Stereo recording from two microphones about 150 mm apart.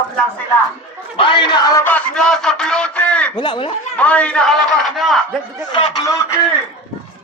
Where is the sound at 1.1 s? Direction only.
35° left (ahead or behind).